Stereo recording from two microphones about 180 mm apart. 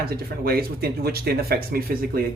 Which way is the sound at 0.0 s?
55° right (ahead or behind).